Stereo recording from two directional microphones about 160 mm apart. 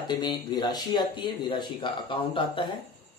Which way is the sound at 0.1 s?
30° left (ahead or behind).